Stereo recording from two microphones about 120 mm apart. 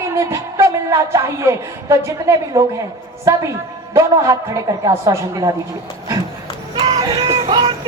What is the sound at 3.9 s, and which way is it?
Speech, 30° right (ahead or behind).